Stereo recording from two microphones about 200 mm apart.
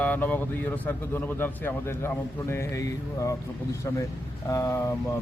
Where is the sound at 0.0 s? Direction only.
10° left (ahead or behind).